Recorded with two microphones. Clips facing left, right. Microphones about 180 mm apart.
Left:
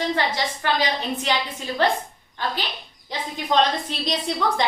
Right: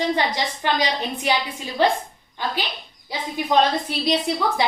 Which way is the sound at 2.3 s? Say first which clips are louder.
Right 1 dB; 15° right (ahead or behind).